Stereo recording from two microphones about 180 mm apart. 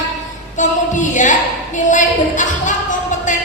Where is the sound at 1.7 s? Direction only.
45° left (ahead or behind).